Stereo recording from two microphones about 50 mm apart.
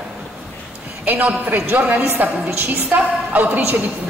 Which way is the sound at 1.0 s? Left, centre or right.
Right.